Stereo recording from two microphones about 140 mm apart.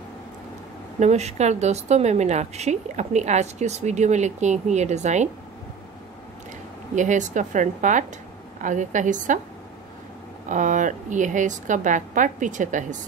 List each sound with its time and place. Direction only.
0.9 s a woman's voice: 55° right (ahead or behind)
7.0 s a woman's voice: 60° right (ahead or behind)
10.5 s a woman's voice: 65° right (ahead or behind)